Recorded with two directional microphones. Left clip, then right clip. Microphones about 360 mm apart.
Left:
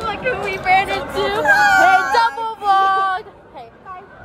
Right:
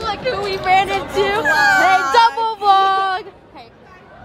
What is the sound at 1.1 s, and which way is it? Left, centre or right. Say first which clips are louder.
Speech: right 2 dB; right.